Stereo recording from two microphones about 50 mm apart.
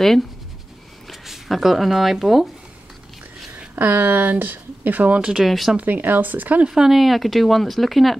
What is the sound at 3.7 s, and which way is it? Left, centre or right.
Speech, right.